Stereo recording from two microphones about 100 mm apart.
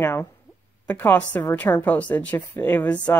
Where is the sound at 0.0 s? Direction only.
25° left (ahead or behind).